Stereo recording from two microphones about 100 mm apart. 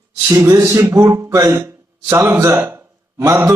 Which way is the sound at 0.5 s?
30° right (ahead or behind).